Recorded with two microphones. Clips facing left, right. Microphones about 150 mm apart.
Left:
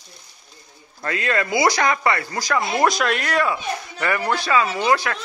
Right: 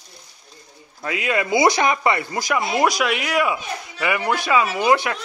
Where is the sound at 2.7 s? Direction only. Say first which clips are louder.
Even; 10° right (ahead or behind).